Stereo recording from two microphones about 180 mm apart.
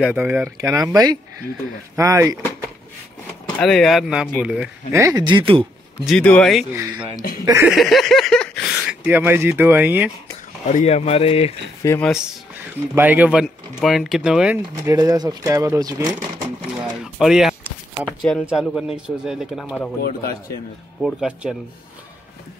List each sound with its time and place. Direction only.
0.0 s speech: 5° right (ahead or behind)
3.5 s speech: 5° left (ahead or behind)
4.9 s speech: 20° right (ahead or behind)
6.0 s speech: 5° left (ahead or behind)
6.7 s speech: 10° right (ahead or behind)
7.7 s a sound: centre (ahead or behind)
10.7 s a man's voice: 40° left (ahead or behind)
11.8 s speech: 15° left (ahead or behind)
12.1 s speech: 5° right (ahead or behind)
14.9 s speech: 20° right (ahead or behind)
17.0 s a sound: 5° right (ahead or behind)
18.4 s speech: centre (ahead or behind)
20.0 s speech: 55° left (ahead or behind)
21.0 s speech: 5° right (ahead or behind)